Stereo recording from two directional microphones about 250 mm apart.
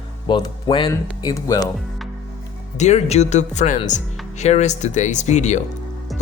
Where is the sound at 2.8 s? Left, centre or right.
Left.